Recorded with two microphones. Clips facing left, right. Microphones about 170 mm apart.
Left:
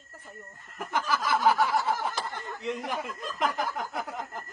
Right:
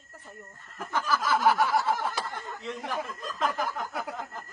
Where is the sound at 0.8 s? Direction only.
15° left (ahead or behind).